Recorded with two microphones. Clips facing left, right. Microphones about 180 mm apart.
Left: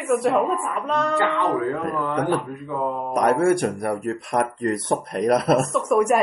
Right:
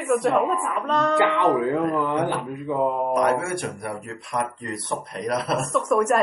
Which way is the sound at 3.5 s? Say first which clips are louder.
Left 6 dB; 45° left (ahead or behind).